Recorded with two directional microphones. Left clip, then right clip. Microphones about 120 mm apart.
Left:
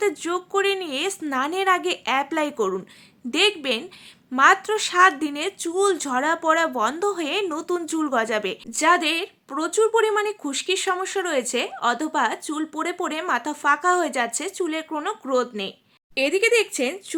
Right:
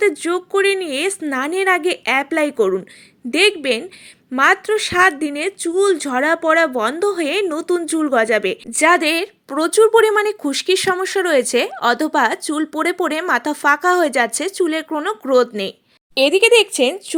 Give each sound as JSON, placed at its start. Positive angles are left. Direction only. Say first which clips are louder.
{"t": 0.0, "sound": "a woman's voice", "louder": "right 6 dB", "side_deg": -30}